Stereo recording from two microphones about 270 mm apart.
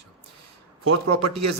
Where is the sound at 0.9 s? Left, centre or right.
Right.